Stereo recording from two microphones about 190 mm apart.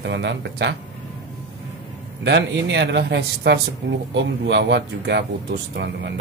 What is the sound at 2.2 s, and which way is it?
Speech, 65° right (ahead or behind).